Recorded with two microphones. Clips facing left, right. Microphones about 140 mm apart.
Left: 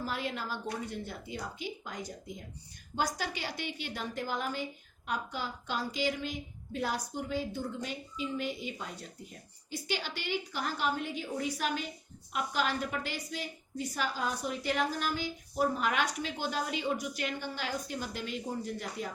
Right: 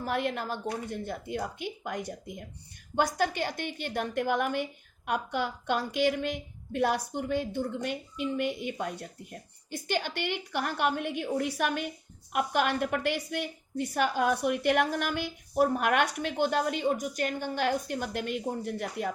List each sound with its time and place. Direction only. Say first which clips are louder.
0.0 s a woman's voice: right 5 dB; 60° right (ahead or behind)